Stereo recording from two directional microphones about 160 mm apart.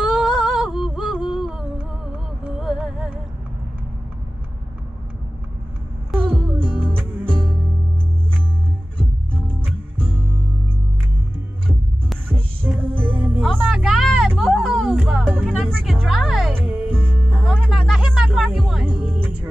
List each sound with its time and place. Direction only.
0.0 s music: centre (ahead or behind)
6.6 s music: 10° right (ahead or behind)
9.9 s music: 10° right (ahead or behind)
12.3 s music: 10° right (ahead or behind)
13.4 s music: centre (ahead or behind)
15.5 s music: centre (ahead or behind)
16.5 s music: 10° right (ahead or behind)
16.9 s music: 5° left (ahead or behind)
18.9 s music: 10° right (ahead or behind)